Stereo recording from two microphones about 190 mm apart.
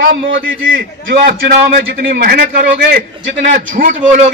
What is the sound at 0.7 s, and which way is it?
A man's voice, 50° right (ahead or behind).